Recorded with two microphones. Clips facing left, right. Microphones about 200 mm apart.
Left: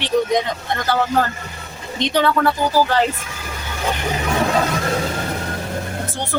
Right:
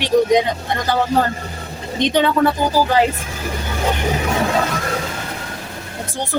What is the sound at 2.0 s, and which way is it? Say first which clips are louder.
A man's voice: right 2 dB; 20° right (ahead or behind).